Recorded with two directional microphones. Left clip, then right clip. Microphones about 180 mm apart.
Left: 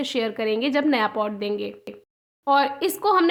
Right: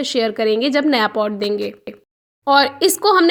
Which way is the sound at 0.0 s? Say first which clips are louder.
Right 7 dB; 20° right (ahead or behind).